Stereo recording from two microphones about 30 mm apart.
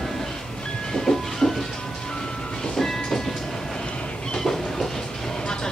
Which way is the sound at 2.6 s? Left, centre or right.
Centre.